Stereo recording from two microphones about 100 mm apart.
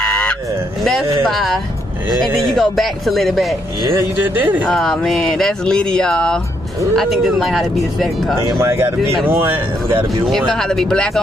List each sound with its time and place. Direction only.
0.0 s a sound: 10° left (ahead or behind)
2.1 s speech: 5° left (ahead or behind)
4.6 s speech: 5° left (ahead or behind)
8.5 s speech: 25° right (ahead or behind)
10.2 s speech: 5° left (ahead or behind)